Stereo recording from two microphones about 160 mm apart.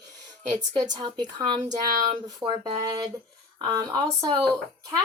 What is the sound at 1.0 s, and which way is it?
A woman's voice, 25° right (ahead or behind).